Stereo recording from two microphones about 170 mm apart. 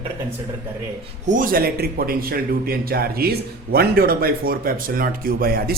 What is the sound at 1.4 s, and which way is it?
A man's voice, 55° right (ahead or behind).